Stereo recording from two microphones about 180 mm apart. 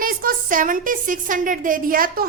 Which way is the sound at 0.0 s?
50° right (ahead or behind).